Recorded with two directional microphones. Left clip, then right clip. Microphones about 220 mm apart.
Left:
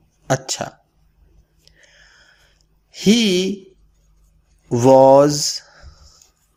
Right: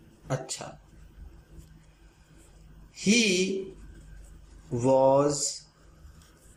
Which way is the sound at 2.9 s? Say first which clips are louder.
Left 8 dB; 35° left (ahead or behind).